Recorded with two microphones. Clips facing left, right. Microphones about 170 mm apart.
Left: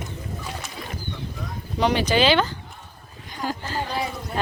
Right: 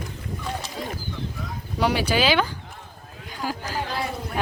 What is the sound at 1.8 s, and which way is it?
Speech, 10° right (ahead or behind).